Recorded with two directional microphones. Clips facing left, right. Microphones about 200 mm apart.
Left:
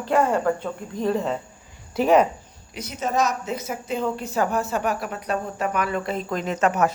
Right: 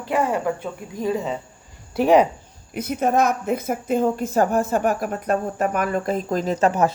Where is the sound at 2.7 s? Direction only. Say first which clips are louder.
Right 5 dB; 55° right (ahead or behind).